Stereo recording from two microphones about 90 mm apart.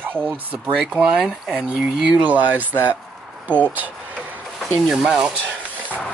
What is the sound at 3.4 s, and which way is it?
Speech, 15° left (ahead or behind).